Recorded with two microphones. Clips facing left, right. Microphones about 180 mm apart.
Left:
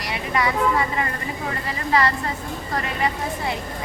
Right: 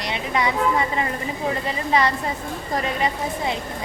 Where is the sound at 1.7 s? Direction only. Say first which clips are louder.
Left 1 dB; 20° right (ahead or behind).